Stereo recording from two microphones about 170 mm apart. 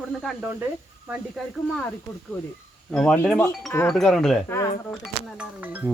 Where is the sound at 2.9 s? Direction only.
5° left (ahead or behind).